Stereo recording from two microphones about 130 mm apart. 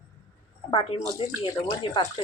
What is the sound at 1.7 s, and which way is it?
Speech, 35° left (ahead or behind).